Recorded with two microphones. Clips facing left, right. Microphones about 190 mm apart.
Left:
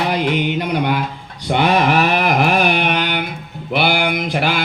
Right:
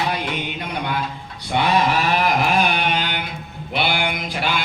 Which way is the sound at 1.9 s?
60° left (ahead or behind).